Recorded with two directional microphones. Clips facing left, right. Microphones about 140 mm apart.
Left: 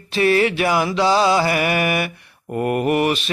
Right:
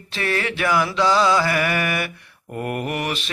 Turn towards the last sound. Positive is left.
turn(degrees=25)  # may be behind; listen again after turning